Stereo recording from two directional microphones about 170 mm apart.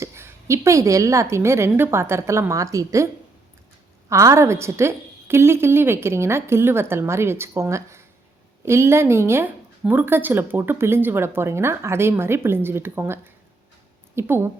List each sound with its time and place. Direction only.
0.0 s a woman's voice: 15° right (ahead or behind)
4.1 s a woman's voice: 20° right (ahead or behind)
14.2 s a woman's voice: 15° right (ahead or behind)